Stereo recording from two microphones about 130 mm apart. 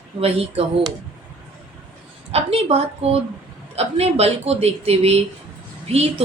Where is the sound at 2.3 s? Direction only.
50° right (ahead or behind).